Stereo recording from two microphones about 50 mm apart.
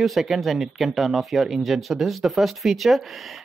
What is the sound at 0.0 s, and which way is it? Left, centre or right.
Speech, centre.